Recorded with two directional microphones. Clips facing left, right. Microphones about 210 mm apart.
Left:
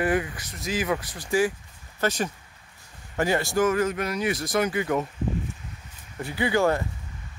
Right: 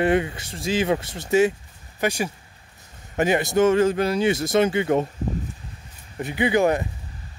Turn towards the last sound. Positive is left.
turn(degrees=-20)  # may be behind; listen again after turning